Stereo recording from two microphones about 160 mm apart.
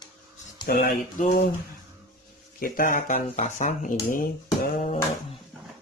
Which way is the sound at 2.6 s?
60° left (ahead or behind).